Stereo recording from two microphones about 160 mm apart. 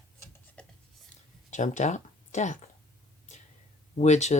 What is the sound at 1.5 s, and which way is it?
Speech, 50° left (ahead or behind).